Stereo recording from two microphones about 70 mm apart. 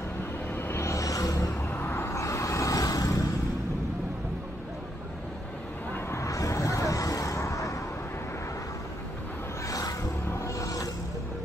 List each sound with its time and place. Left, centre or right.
0.6 s vehicle: left
1.7 s vehicle: left
2.1 s vehicle: left
6.2 s vehicle: left
9.7 s vehicle: left
10.4 s roaring cats: left